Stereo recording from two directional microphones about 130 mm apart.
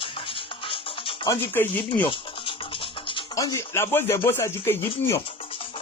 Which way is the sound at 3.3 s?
25° left (ahead or behind).